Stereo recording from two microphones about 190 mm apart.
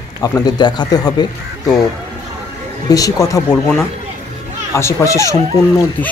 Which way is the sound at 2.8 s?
20° left (ahead or behind).